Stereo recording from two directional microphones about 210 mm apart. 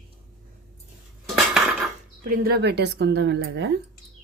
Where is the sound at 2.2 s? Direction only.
50° right (ahead or behind).